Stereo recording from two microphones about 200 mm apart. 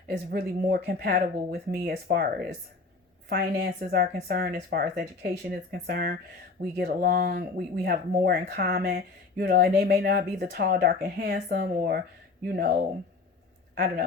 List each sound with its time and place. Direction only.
0.3 s speech: 50° right (ahead or behind)
13.7 s speech: 45° right (ahead or behind)